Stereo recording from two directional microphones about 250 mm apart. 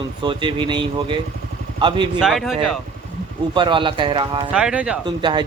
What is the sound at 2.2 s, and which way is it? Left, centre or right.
Speech, centre.